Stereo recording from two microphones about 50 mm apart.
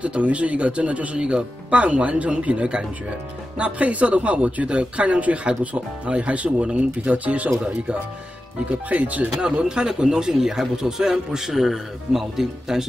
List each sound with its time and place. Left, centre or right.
0.0 s speech: right
8.6 s speech: right
9.4 s speech: centre